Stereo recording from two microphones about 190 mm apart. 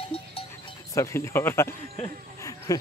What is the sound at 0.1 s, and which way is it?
Music, 30° left (ahead or behind).